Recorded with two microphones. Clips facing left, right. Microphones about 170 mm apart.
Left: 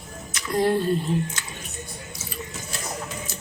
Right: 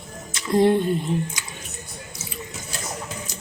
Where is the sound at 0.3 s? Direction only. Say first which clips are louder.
Right 4 dB; 25° right (ahead or behind).